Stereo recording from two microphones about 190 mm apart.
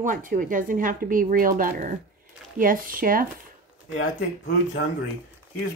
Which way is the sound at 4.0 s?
65° left (ahead or behind).